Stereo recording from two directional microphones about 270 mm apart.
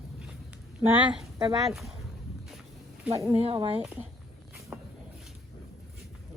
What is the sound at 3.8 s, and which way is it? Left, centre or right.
Speech, centre.